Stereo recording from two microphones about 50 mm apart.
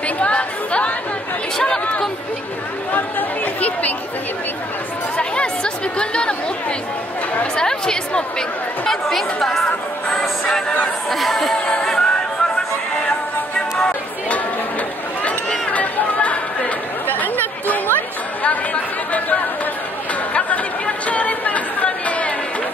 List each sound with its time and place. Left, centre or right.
0.2 s chatter: left
2.9 s chatter: left
5.1 s chatter: left
7.5 s chatter: centre
9.7 s music: centre
11.1 s chatter: centre
11.6 s music: centre
15.7 s chatter: left
18.4 s chatter: left
21.1 s a sound: left